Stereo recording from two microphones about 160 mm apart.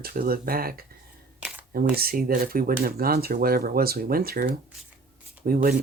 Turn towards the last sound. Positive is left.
turn(degrees=-65)  # may be behind; listen again after turning